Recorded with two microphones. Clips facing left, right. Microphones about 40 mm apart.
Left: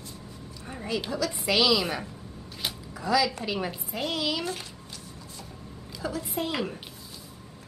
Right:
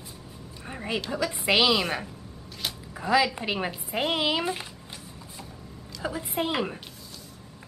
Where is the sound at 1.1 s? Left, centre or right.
Right.